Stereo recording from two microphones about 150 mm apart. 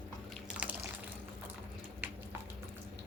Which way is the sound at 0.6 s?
10° right (ahead or behind).